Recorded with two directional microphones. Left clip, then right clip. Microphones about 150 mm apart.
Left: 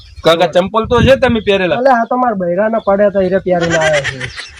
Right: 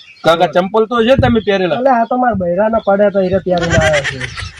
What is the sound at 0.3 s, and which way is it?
Speech, 20° left (ahead or behind).